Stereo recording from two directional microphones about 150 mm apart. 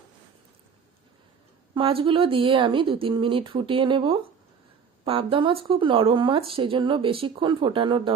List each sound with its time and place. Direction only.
1.7 s speech: 35° right (ahead or behind)